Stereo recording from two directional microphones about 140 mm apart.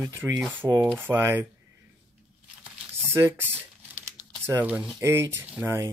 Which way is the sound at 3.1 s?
15° right (ahead or behind).